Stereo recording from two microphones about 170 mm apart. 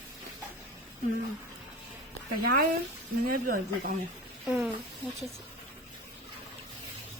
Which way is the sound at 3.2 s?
55° right (ahead or behind).